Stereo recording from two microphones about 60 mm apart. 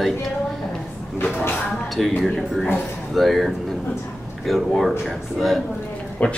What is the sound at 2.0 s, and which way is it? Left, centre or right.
Speech, centre.